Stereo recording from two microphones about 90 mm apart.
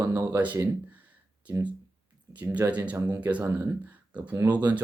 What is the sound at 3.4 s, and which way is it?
Speech, 30° right (ahead or behind).